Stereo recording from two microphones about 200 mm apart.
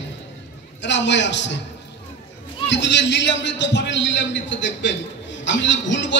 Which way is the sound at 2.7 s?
60° left (ahead or behind).